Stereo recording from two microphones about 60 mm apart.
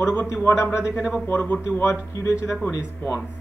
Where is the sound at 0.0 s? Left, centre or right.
Left.